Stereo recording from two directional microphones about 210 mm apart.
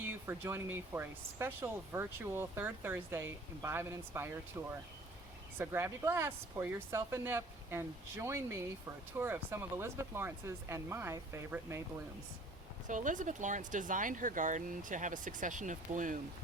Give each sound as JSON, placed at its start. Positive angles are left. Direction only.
{"t": 0.1, "sound": "speech", "side_deg": -10}
{"t": 12.9, "sound": "speech", "side_deg": -40}